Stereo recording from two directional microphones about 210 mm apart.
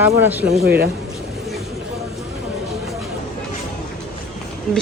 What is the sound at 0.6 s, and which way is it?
Speech, 50° right (ahead or behind).